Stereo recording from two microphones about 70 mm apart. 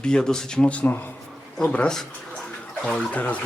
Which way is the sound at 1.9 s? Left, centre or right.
Centre.